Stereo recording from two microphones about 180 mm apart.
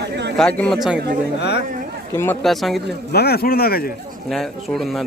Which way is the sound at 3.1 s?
60° left (ahead or behind).